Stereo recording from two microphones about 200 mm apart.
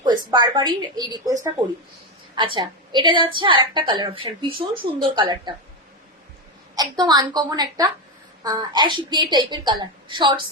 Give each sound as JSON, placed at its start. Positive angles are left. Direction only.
{"t": 0.0, "sound": "a woman's voice", "side_deg": -20}
{"t": 2.3, "sound": "a woman's voice", "side_deg": -25}
{"t": 6.7, "sound": "speech", "side_deg": -20}